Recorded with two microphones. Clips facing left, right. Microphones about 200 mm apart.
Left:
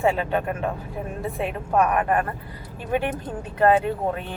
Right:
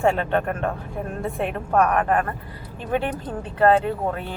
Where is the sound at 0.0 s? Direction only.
5° left (ahead or behind).